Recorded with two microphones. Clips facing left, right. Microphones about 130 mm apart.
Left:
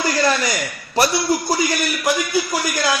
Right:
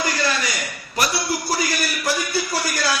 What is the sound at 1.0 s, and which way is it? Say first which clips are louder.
Speech: left 6 dB; 30° left (ahead or behind).